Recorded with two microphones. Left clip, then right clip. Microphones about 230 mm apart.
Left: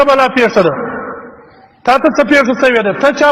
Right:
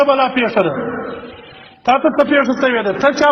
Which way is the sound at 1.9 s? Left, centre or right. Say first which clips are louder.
Left 3 dB; left.